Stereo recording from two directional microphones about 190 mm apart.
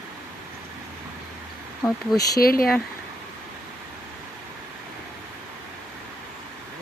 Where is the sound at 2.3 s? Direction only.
50° left (ahead or behind).